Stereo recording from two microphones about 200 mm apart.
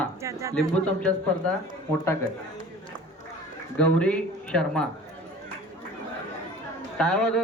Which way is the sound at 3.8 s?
5° left (ahead or behind).